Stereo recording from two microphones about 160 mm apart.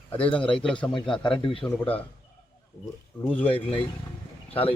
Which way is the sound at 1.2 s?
30° left (ahead or behind).